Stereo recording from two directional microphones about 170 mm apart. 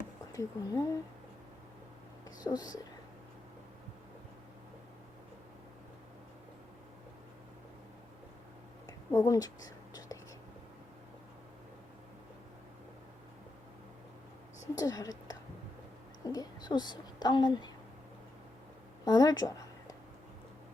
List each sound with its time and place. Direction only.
0.3 s speech: 20° left (ahead or behind)
2.4 s speech: 20° left (ahead or behind)
8.9 s whispering: 20° left (ahead or behind)
14.8 s a sound: 20° left (ahead or behind)
16.2 s a woman's voice: 20° left (ahead or behind)
19.0 s a sound: 20° left (ahead or behind)